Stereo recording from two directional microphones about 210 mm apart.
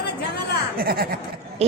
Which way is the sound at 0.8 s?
45° right (ahead or behind).